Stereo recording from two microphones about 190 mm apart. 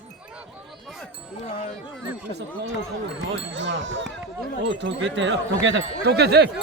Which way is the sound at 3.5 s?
70° right (ahead or behind).